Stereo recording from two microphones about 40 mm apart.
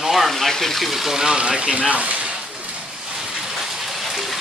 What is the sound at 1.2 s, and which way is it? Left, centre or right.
Speech, centre.